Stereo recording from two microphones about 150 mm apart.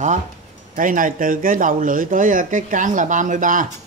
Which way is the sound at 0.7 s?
65° right (ahead or behind).